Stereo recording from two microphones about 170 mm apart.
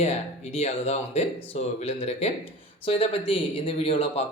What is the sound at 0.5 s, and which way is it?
Speech, 40° left (ahead or behind).